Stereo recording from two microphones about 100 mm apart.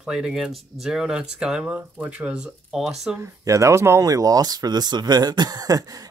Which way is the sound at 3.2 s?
35° right (ahead or behind).